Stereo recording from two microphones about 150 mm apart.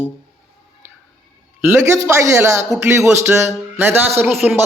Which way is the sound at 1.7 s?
15° right (ahead or behind).